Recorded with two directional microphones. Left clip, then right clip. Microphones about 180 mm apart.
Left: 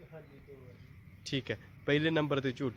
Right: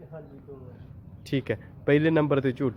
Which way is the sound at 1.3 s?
5° left (ahead or behind).